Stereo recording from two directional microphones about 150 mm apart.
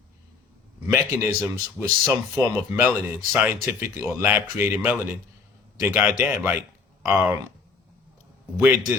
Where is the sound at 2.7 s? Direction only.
15° right (ahead or behind).